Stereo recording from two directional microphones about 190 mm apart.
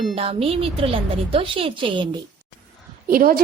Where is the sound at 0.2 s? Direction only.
30° right (ahead or behind).